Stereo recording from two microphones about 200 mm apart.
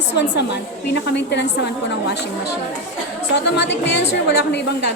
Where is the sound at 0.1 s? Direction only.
60° left (ahead or behind).